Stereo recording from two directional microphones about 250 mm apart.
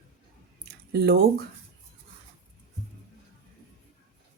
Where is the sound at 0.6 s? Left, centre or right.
Right.